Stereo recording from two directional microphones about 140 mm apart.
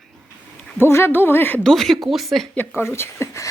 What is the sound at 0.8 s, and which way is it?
Speech, 15° left (ahead or behind).